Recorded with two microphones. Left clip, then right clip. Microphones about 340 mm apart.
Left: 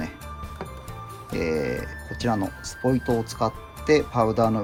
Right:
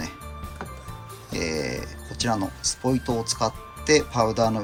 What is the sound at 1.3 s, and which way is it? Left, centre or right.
Speech, centre.